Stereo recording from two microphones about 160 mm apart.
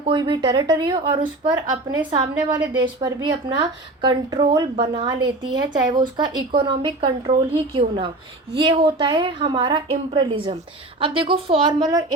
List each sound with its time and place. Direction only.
0.0 s a woman's voice: 30° right (ahead or behind)